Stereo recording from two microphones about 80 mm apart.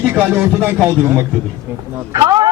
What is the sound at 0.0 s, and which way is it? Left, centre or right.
Speech, right.